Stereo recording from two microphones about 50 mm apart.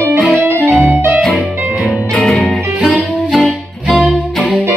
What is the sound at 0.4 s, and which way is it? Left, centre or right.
Music, right.